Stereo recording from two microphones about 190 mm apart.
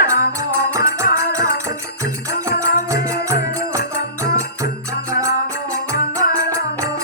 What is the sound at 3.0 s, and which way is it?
Music, 15° right (ahead or behind).